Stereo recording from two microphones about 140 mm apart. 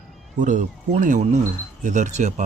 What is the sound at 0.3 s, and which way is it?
Speech, 65° right (ahead or behind).